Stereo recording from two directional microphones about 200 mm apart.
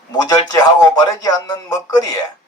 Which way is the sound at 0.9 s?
20° left (ahead or behind).